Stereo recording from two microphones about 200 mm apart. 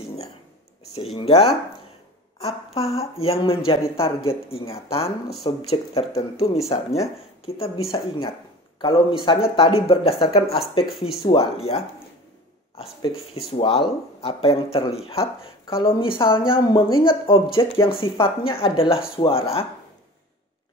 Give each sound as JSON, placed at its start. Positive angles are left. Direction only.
{"t": 1.1, "sound": "speech", "side_deg": 30}
{"t": 10.8, "sound": "speech", "side_deg": 0}
{"t": 11.2, "sound": "speech", "side_deg": 30}